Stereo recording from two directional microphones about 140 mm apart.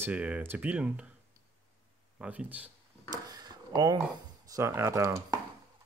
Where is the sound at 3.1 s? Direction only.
30° right (ahead or behind).